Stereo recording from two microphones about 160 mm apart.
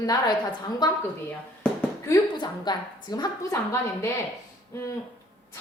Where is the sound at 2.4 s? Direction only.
25° left (ahead or behind).